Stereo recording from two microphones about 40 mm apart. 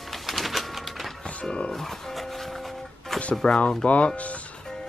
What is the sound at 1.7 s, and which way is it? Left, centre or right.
Music, centre.